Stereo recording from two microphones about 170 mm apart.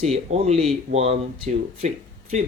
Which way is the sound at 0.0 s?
40° right (ahead or behind).